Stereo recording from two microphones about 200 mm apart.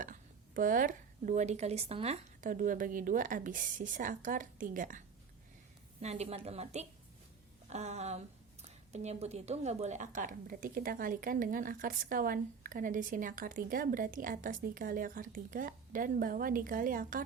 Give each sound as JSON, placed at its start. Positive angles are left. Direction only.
{"t": 0.0, "sound": "a woman's voice", "side_deg": -40}